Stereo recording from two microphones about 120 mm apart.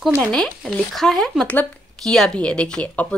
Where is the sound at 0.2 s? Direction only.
5° left (ahead or behind).